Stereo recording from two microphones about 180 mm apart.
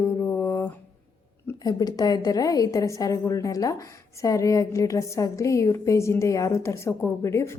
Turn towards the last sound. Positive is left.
turn(degrees=15)  # may be behind; listen again after turning